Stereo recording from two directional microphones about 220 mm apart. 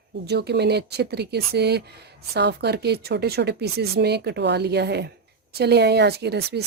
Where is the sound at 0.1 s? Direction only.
50° right (ahead or behind).